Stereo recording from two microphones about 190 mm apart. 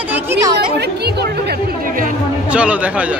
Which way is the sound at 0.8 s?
60° right (ahead or behind).